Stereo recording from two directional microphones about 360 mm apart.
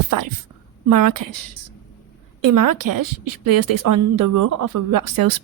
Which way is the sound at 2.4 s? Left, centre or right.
Right.